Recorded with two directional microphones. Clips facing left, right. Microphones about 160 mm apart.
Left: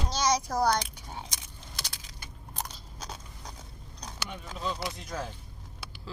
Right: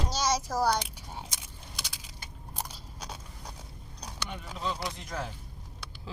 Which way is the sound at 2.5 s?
10° right (ahead or behind).